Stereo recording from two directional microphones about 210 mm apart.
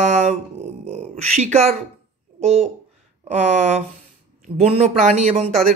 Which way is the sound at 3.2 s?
30° right (ahead or behind).